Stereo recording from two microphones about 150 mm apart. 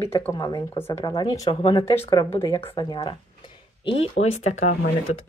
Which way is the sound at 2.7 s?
30° left (ahead or behind).